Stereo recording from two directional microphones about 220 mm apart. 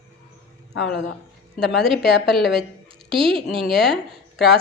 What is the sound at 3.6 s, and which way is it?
Speech, centre (ahead or behind).